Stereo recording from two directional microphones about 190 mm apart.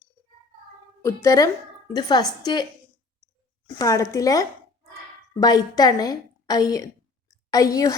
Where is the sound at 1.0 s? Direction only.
15° left (ahead or behind).